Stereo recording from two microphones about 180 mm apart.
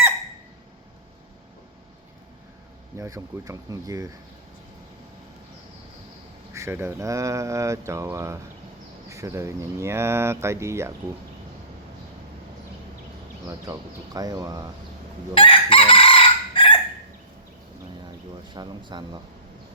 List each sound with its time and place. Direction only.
3.0 s speech: 20° right (ahead or behind)
6.5 s speech: 15° right (ahead or behind)
13.5 s speech: 20° right (ahead or behind)
15.4 s chicken: 30° left (ahead or behind)
18.5 s speech: 25° right (ahead or behind)